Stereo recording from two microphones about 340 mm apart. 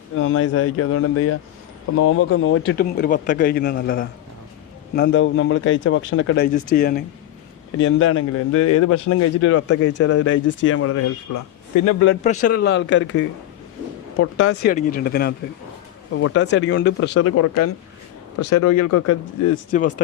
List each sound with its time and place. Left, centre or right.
0.2 s a man's voice: left
7.8 s a man's voice: left
12.2 s a man's voice: left